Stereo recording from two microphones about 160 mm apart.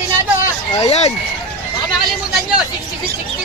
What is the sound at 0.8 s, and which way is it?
Speech, 40° left (ahead or behind).